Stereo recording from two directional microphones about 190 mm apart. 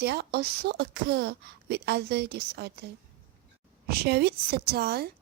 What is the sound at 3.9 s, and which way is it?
A woman's voice, 55° right (ahead or behind).